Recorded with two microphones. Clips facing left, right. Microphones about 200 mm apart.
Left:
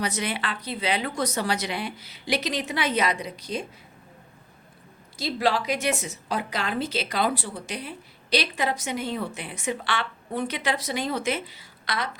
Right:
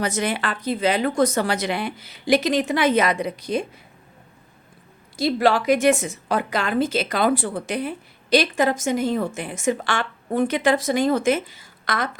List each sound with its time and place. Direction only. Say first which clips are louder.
0.0 s a woman's voice: right 5 dB; 50° right (ahead or behind)
5.1 s a woman's voice: right 6 dB; 50° right (ahead or behind)